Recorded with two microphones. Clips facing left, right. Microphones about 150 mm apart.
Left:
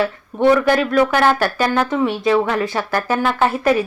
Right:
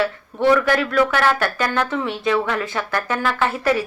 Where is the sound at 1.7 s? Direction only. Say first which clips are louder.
Left 4 dB; 15° left (ahead or behind).